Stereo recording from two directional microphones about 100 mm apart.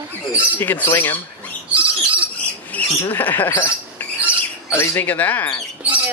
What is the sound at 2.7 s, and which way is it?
Speech, 20° left (ahead or behind).